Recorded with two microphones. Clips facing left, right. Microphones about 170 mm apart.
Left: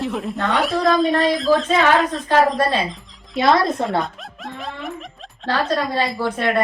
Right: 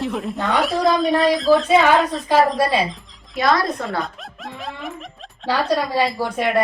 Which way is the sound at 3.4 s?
25° left (ahead or behind).